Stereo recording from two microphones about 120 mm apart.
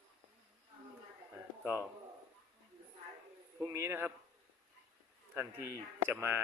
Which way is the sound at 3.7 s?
20° right (ahead or behind).